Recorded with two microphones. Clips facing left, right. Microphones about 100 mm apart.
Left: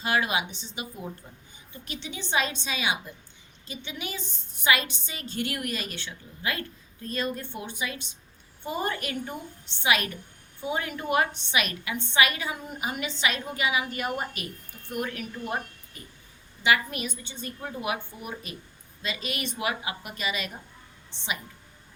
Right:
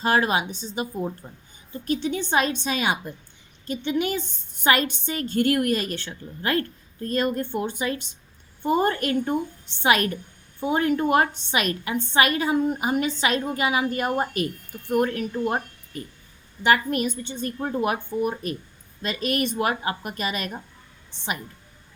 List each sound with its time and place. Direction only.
0.0 s a woman's voice: 40° right (ahead or behind)